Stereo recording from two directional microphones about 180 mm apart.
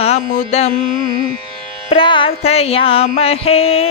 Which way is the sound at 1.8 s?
30° left (ahead or behind).